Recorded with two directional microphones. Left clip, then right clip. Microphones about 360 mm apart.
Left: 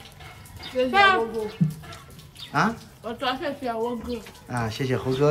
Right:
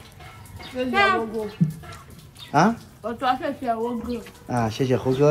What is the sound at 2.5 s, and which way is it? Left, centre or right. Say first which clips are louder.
Speech: right 4 dB; centre.